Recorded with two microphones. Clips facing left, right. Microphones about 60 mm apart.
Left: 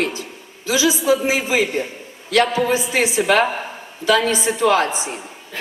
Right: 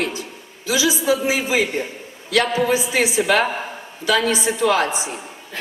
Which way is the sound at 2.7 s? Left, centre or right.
Left.